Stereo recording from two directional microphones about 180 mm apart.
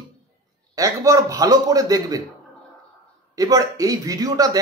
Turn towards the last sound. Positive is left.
turn(degrees=-20)  # may be behind; listen again after turning